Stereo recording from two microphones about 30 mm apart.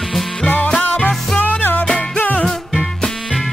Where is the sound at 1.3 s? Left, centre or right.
Left.